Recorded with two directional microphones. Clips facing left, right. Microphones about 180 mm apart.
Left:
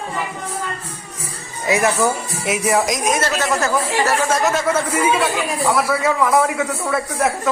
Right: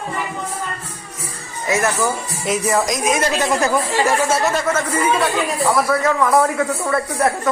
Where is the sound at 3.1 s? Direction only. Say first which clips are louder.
Right 1 dB; 15° right (ahead or behind).